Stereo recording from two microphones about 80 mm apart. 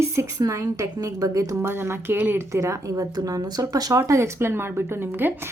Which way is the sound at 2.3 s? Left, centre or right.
Right.